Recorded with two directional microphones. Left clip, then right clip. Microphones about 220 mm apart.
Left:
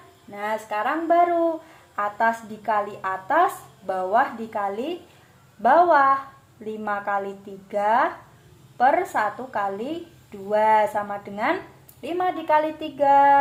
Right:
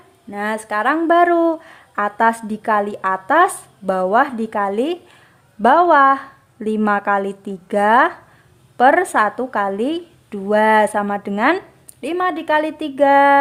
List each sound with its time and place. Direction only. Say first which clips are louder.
0.3 s speech: right 5 dB; 45° right (ahead or behind)